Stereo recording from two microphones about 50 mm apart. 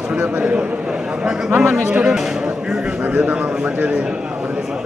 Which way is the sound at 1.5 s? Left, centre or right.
Right.